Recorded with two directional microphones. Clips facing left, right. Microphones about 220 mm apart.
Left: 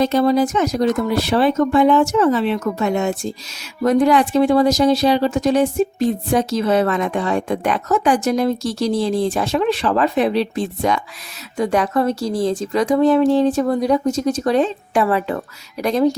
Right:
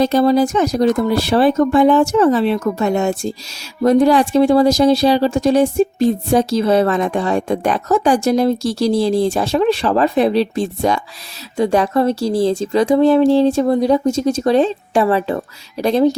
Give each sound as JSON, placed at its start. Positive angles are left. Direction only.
{"t": 0.0, "sound": "speech", "side_deg": -35}